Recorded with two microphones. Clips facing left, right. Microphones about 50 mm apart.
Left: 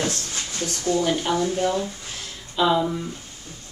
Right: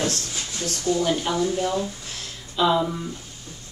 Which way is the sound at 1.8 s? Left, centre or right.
Centre.